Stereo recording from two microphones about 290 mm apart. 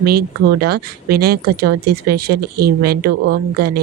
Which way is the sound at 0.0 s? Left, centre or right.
Right.